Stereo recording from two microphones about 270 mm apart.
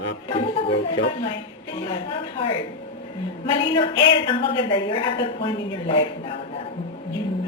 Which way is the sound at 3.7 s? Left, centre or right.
Centre.